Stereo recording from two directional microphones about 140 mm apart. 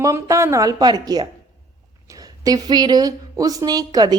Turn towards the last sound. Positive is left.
turn(degrees=-30)  # may be behind; listen again after turning